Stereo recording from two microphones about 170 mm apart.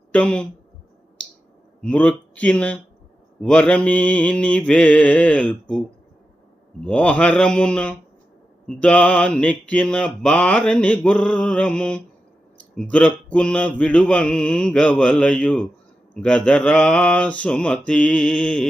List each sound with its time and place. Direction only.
0.1 s speech: 5° left (ahead or behind)
1.8 s mantra: 5° left (ahead or behind)
6.8 s mantra: 5° left (ahead or behind)